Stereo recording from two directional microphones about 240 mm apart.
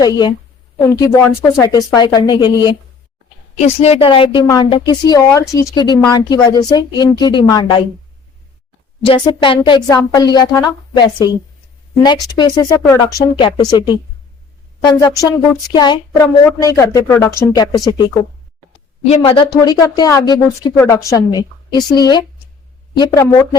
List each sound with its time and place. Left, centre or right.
0.0 s a woman's voice: centre
9.0 s a woman's voice: centre